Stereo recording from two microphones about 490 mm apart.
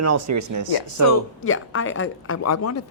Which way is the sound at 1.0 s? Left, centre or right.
Left.